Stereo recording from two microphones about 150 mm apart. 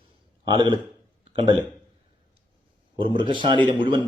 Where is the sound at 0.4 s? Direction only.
30° right (ahead or behind).